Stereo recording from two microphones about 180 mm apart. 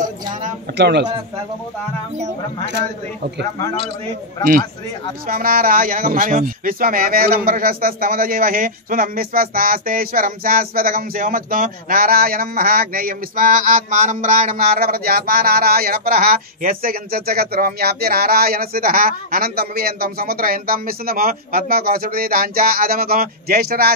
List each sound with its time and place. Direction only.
0.7 s speech: 70° right (ahead or behind)
5.3 s speech: 50° right (ahead or behind)
14.8 s speech: 55° right (ahead or behind)